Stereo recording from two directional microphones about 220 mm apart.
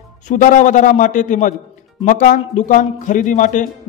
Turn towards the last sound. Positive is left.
turn(degrees=35)  # may be behind; listen again after turning